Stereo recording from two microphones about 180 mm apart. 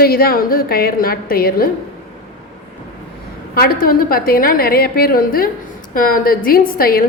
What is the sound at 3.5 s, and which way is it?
A woman's voice, 55° left (ahead or behind).